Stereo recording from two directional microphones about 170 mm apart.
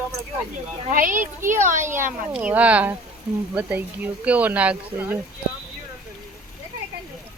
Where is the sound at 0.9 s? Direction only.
50° right (ahead or behind).